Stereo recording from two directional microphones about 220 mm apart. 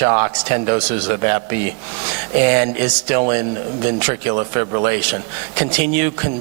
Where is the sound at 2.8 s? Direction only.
15° right (ahead or behind).